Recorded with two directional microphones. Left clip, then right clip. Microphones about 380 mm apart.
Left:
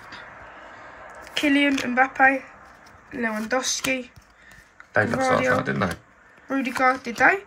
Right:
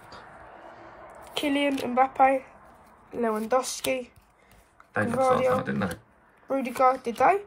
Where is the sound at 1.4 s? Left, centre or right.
Centre.